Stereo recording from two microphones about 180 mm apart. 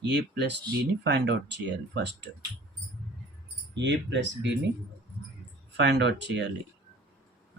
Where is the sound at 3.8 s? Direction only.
85° right.